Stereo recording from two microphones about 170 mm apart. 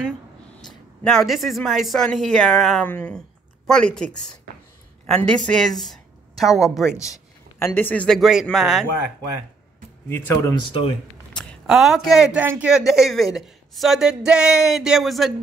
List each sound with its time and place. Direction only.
1.0 s a woman's voice: centre (ahead or behind)
7.0 s a man's voice: 15° left (ahead or behind); by 8.8 s centre (ahead or behind)
10.0 s speech: 15° left (ahead or behind)
11.3 s speech: centre (ahead or behind)